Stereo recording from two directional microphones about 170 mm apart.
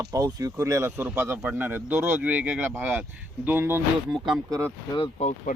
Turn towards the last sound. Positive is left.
turn(degrees=45)  # may be behind; listen again after turning